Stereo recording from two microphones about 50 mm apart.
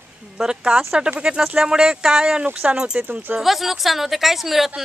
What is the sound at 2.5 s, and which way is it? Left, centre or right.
Speech, right.